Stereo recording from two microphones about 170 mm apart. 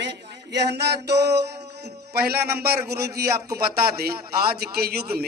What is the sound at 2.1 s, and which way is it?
A man's voice, 70° right (ahead or behind).